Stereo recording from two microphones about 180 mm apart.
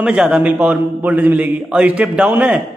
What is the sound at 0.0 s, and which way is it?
A man's voice, 5° right (ahead or behind).